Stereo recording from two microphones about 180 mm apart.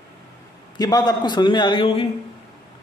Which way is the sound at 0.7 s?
20° left (ahead or behind).